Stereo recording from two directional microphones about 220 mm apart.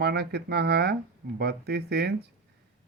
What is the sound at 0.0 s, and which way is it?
Speech, 50° right (ahead or behind).